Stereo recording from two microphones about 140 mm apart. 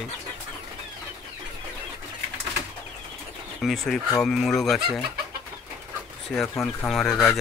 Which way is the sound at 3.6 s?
Centre (ahead or behind).